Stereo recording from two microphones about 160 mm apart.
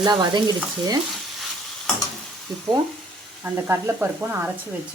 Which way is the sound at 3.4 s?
15° right (ahead or behind).